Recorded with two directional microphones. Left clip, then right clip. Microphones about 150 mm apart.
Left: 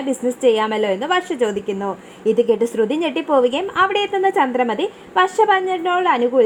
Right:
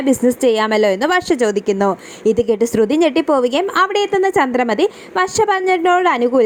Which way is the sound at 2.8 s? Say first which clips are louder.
Right 5 dB; 30° right (ahead or behind).